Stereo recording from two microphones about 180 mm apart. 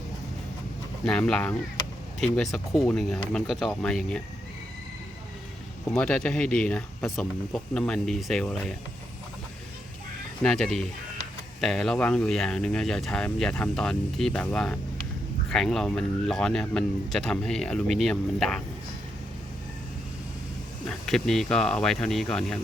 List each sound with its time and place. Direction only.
1.0 s speech: 5° left (ahead or behind)
5.9 s speech: 5° left (ahead or behind)
10.4 s speech: 5° left (ahead or behind)
20.8 s speech: centre (ahead or behind)